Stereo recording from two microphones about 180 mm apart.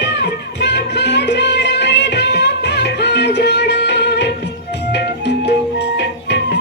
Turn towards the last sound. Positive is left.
turn(degrees=75)  # may be behind; listen again after turning